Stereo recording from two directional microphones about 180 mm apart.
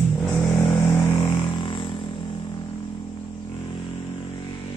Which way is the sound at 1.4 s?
30° left (ahead or behind).